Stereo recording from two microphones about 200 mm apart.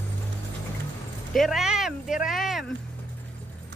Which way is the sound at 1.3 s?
Centre (ahead or behind).